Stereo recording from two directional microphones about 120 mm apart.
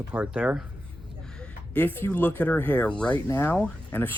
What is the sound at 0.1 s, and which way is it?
Speech, 15° right (ahead or behind).